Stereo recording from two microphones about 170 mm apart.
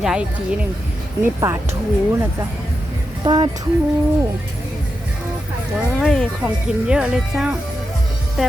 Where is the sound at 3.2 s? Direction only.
25° right (ahead or behind).